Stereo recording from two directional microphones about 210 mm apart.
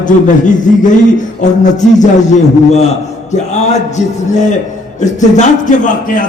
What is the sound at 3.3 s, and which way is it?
Speech, 30° left (ahead or behind).